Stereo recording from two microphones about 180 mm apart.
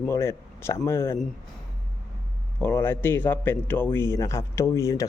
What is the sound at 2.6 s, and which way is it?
A man's voice, 10° left (ahead or behind).